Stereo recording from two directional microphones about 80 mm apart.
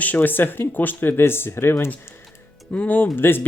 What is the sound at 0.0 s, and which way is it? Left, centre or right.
Speech, left.